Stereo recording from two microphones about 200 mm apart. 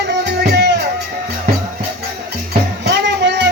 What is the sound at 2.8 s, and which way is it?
Music, 60° right (ahead or behind).